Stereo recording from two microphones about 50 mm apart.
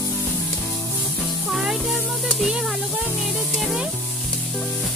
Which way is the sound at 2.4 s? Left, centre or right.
Centre.